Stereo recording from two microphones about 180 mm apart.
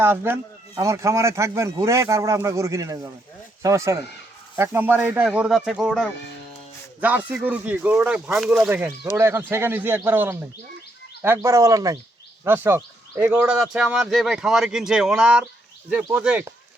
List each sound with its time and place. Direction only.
0.0 s speech: 10° right (ahead or behind)
7.3 s speech: 10° right (ahead or behind)